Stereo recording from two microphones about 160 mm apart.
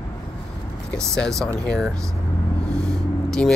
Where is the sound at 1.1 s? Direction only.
5° left (ahead or behind).